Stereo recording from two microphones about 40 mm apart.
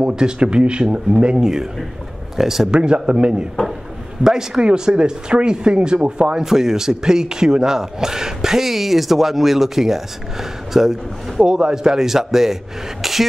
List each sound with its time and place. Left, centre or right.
0.0 s speech: right
1.4 s speech: centre
2.7 s speech: right
4.2 s speech: centre
6.4 s speech: centre